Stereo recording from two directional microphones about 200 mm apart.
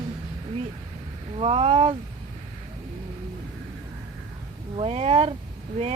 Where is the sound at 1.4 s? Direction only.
30° right (ahead or behind).